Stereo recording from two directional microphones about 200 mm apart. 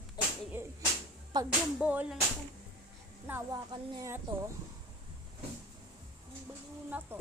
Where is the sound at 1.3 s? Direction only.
20° right (ahead or behind).